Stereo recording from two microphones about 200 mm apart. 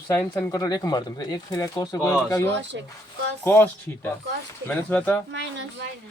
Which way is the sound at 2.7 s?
60° right (ahead or behind).